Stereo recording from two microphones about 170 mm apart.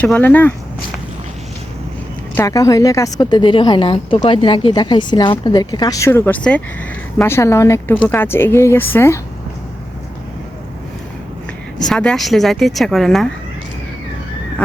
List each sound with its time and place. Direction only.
0.0 s a woman's voice: 10° left (ahead or behind)
2.3 s a woman's voice: 20° left (ahead or behind)
11.8 s a woman's voice: 5° left (ahead or behind)